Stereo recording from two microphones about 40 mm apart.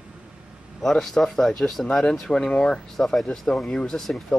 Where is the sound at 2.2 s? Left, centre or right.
Centre.